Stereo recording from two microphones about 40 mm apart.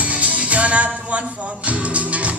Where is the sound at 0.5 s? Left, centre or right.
Right.